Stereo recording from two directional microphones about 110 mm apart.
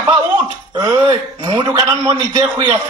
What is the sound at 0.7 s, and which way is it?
A man's voice, 35° right (ahead or behind).